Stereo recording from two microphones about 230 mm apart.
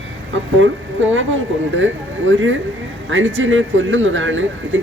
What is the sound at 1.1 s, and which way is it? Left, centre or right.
Speech, right.